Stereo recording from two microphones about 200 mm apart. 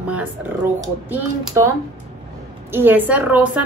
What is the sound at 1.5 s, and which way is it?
A woman's voice, 15° right (ahead or behind).